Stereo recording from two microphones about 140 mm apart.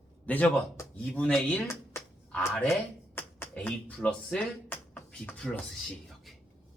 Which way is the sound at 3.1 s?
10° left (ahead or behind).